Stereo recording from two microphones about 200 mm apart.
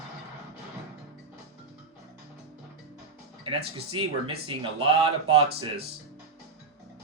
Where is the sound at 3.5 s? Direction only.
25° right (ahead or behind).